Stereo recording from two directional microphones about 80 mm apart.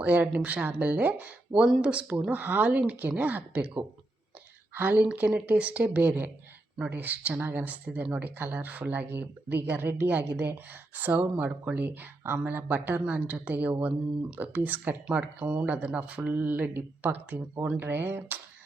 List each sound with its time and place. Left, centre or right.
0.0 s speech: centre
17.3 s speech: right